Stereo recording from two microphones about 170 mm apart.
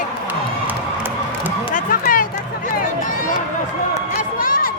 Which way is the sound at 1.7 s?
55° left (ahead or behind).